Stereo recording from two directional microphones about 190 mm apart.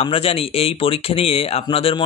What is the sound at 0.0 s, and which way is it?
Speech, 30° left (ahead or behind).